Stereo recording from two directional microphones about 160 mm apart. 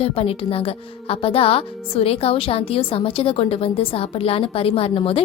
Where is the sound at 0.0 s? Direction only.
35° left (ahead or behind).